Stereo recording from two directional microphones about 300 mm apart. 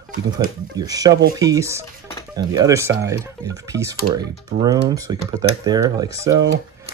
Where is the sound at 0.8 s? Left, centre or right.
Centre.